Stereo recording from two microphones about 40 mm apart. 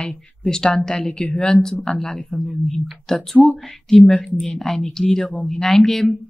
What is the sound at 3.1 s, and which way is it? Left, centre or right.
A woman's voice, centre.